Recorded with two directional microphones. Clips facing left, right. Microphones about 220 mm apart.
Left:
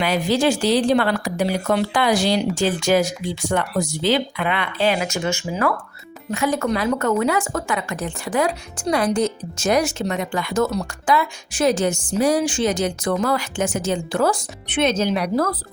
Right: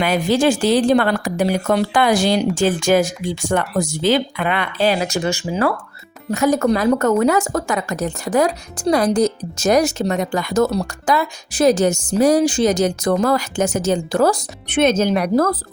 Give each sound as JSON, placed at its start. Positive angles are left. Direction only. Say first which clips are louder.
{"t": 0.0, "sound": "a woman's voice", "louder": "right 3 dB", "side_deg": -50}